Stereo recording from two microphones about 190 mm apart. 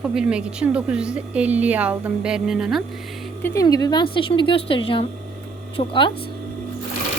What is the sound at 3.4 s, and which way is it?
A woman's voice, 15° left (ahead or behind).